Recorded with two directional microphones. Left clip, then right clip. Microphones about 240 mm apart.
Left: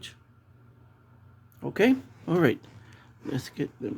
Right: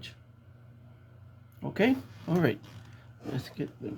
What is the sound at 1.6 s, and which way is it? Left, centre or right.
Speech, left.